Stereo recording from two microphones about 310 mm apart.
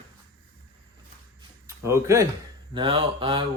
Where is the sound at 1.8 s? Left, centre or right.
Centre.